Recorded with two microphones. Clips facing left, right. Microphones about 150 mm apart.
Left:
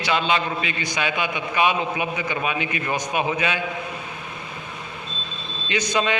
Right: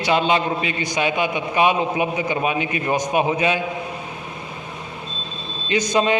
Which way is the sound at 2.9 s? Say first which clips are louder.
Right 5 dB; 45° right (ahead or behind).